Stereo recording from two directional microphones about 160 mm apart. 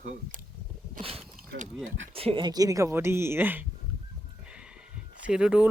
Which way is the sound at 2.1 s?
35° right (ahead or behind).